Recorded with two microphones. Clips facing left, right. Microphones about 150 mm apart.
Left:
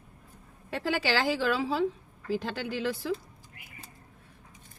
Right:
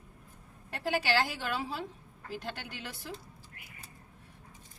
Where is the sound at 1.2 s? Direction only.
90° left.